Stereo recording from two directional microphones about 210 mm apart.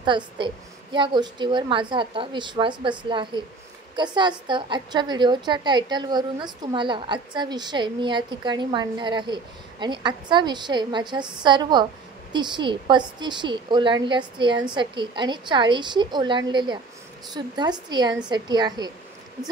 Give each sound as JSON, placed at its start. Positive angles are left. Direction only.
{"t": 0.0, "sound": "a woman's voice", "side_deg": -20}